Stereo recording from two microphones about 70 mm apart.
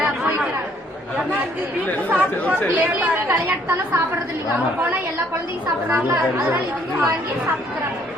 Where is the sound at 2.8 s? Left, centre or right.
Right.